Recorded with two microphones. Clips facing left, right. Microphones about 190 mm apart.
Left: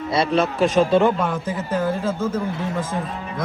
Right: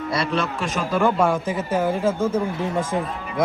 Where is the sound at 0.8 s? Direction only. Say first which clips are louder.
Left 4 dB; 25° left (ahead or behind).